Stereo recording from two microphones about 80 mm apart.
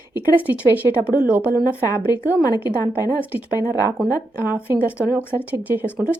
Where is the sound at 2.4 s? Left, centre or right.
Left.